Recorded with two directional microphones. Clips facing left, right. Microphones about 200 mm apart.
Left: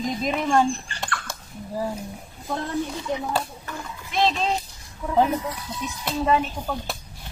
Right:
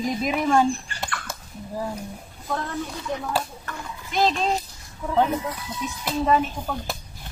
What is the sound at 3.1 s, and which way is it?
Speech, 20° left (ahead or behind).